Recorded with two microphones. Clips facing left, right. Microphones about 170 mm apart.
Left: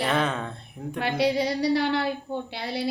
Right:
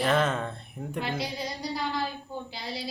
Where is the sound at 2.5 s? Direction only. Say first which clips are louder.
Left 7 dB; 65° left (ahead or behind).